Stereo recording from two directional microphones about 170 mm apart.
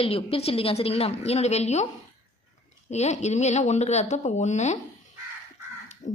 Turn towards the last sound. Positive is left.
turn(degrees=45)  # may be behind; listen again after turning